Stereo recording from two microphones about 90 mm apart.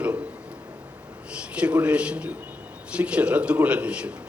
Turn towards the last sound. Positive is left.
turn(degrees=-15)  # may be behind; listen again after turning